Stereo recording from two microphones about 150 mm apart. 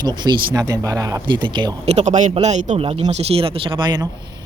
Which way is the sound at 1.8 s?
50° right (ahead or behind).